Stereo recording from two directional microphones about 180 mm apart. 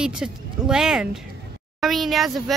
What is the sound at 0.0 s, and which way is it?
Speech, 5° right (ahead or behind).